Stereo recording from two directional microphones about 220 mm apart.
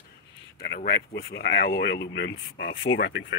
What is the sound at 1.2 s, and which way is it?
Speech, 50° left (ahead or behind).